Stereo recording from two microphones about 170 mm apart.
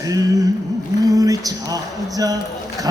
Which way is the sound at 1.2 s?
20° right (ahead or behind).